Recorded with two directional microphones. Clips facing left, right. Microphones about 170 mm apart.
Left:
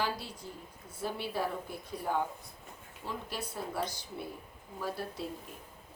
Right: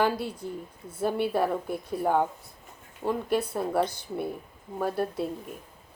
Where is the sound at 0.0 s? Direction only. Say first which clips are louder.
Right 9 dB; 55° right (ahead or behind).